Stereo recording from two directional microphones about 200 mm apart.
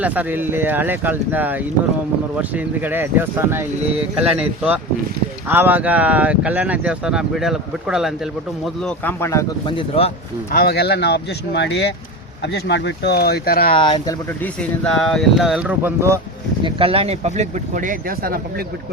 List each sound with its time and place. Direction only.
0.0 s speech: 10° right (ahead or behind); by 10.1 s 25° left (ahead or behind)
10.5 s speech: 50° left (ahead or behind)
13.7 s speech: 25° left (ahead or behind)
14.4 s speech: 5° left (ahead or behind); by 16.2 s 15° right (ahead or behind)
16.6 s speech: 25° right (ahead or behind); by 18.6 s 45° right (ahead or behind)